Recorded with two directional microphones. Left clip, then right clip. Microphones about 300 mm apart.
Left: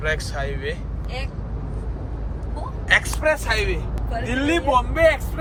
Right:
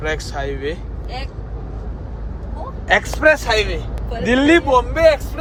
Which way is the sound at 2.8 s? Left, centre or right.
Right.